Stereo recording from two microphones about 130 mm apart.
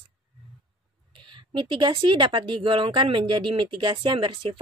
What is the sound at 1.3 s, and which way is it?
Speech, 40° right (ahead or behind).